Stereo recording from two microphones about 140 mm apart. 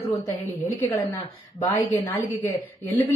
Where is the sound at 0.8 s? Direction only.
20° left (ahead or behind).